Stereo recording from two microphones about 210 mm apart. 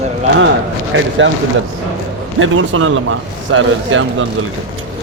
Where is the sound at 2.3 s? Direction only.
70° right (ahead or behind).